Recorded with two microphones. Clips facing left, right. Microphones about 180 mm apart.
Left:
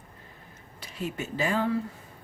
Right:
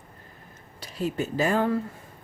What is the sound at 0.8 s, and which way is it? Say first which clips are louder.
Speech: right 5 dB; 35° right (ahead or behind).